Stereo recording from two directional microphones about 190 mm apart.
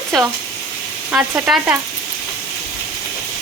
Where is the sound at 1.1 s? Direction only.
5° right (ahead or behind).